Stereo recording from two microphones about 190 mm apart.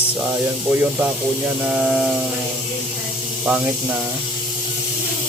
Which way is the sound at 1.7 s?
5° right (ahead or behind).